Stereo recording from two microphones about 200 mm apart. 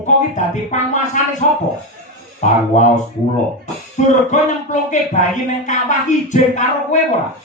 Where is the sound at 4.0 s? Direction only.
35° left (ahead or behind).